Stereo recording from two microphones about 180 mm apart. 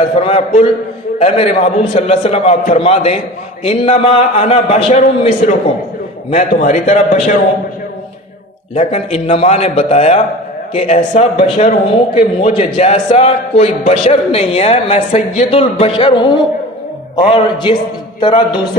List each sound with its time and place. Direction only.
0.2 s a man's voice: 35° left (ahead or behind)
8.7 s a man's voice: 35° left (ahead or behind)